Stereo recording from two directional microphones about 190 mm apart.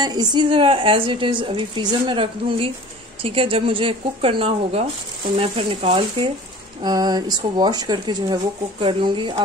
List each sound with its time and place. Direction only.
0.0 s a woman's voice: 20° right (ahead or behind)